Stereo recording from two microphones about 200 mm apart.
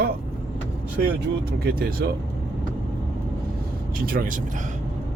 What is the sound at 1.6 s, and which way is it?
Speech, 50° right (ahead or behind).